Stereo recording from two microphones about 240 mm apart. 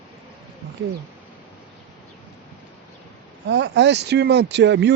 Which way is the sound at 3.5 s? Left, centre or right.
Right.